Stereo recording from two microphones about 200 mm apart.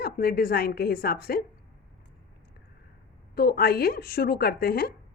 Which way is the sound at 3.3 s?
50° left (ahead or behind).